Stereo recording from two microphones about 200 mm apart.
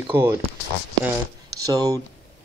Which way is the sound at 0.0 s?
10° right (ahead or behind).